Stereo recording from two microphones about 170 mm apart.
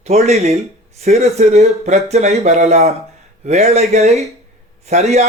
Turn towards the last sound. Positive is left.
turn(degrees=-40)  # may be behind; listen again after turning